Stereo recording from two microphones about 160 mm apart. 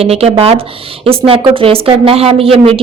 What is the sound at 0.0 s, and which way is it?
Speech, 40° right (ahead or behind).